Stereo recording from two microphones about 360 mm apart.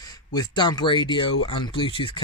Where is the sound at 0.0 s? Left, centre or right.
Centre.